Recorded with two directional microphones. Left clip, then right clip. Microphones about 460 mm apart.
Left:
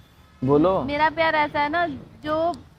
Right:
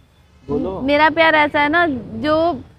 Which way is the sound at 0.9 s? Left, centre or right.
Right.